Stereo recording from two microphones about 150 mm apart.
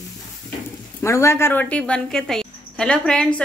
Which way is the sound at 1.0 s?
20° left (ahead or behind).